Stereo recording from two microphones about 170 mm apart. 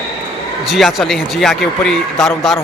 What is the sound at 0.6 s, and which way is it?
Speech, centre (ahead or behind).